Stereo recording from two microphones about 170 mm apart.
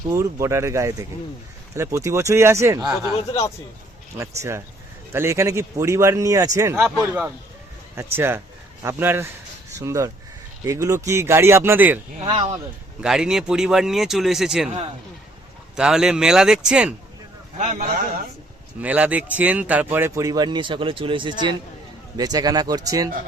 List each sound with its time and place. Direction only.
0.1 s a man's voice: 15° right (ahead or behind)
4.2 s a man's voice: 15° right (ahead or behind)
12.2 s speech: 35° right (ahead or behind)
13.0 s speech: 5° right (ahead or behind)
15.7 s speech: 5° right (ahead or behind)
17.6 s speech: 45° right (ahead or behind)
18.8 s a man's voice: 10° right (ahead or behind)